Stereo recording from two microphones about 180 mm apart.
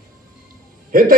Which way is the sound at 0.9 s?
50° right (ahead or behind).